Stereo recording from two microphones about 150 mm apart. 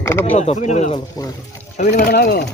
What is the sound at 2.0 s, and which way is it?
Speech, 90° left.